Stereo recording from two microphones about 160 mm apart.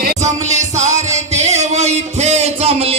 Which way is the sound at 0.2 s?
45° right (ahead or behind).